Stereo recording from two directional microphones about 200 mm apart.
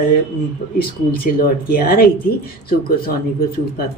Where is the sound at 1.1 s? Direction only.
45° left (ahead or behind).